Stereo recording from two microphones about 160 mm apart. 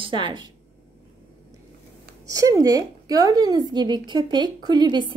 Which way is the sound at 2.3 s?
20° right (ahead or behind).